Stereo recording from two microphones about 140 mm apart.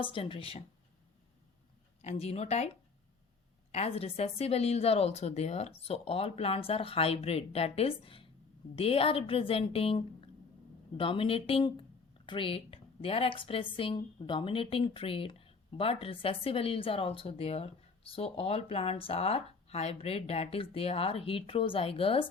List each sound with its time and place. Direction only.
0.0 s speech: 40° left (ahead or behind)
2.0 s a woman's voice: 50° left (ahead or behind)
3.7 s a woman's voice: 45° left (ahead or behind)